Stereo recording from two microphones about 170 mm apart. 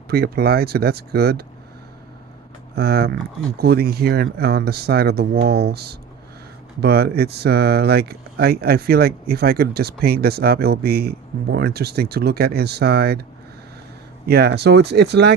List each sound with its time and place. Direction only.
0.1 s speech: 65° right (ahead or behind)
2.7 s speech: 70° right (ahead or behind)
14.3 s speech: 70° right (ahead or behind)